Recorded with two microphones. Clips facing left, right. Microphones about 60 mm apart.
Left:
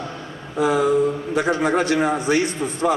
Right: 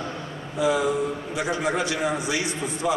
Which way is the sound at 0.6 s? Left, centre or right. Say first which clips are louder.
Left 5 dB; left.